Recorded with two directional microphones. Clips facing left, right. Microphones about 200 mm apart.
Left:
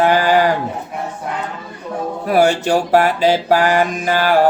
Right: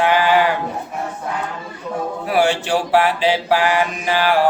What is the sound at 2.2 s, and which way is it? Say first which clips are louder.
Mantra: left 4 dB; 40° left (ahead or behind).